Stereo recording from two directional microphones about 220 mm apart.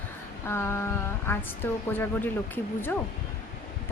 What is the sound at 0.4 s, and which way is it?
A woman's voice, 10° left (ahead or behind).